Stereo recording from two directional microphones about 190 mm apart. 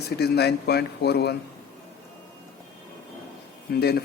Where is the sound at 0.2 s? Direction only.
60° left (ahead or behind).